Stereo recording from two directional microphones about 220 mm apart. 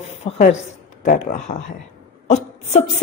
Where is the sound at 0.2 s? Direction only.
30° left (ahead or behind).